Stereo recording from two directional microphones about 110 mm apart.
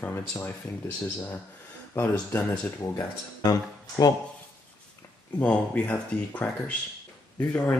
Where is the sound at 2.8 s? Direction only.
30° left (ahead or behind).